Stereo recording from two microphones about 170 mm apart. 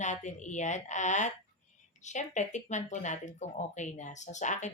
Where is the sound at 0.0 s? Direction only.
45° left (ahead or behind).